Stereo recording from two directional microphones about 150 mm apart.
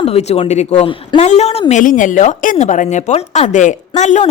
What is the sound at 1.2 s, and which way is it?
Speech, 45° left (ahead or behind).